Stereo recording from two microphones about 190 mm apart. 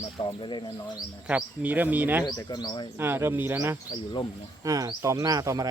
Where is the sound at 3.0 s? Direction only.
10° right (ahead or behind).